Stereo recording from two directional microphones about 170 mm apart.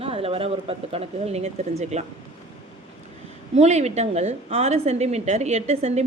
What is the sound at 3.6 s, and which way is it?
A woman's voice, 40° right (ahead or behind).